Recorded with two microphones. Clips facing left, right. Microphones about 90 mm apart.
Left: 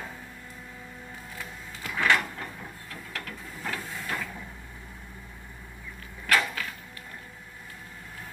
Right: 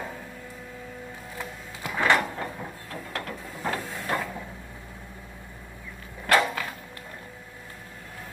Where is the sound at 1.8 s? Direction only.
25° right (ahead or behind).